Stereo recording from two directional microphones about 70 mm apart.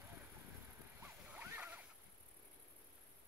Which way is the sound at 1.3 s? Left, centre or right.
Right.